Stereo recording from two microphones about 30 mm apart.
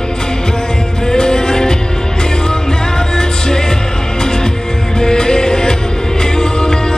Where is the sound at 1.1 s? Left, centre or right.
Left.